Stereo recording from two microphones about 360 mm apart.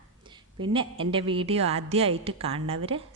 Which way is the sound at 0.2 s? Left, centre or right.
Centre.